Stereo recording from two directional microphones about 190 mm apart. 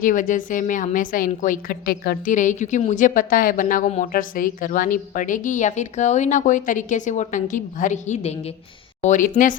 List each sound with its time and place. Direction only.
0.0 s a woman's voice: 45° left (ahead or behind)